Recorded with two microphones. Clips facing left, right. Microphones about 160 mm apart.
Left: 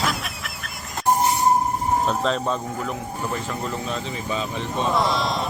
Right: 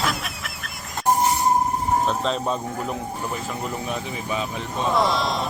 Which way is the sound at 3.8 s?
15° right (ahead or behind).